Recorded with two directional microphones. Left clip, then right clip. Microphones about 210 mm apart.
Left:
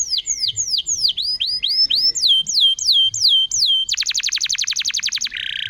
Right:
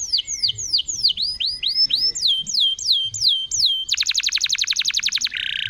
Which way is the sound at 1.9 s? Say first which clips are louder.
Left 4 dB; 10° left (ahead or behind).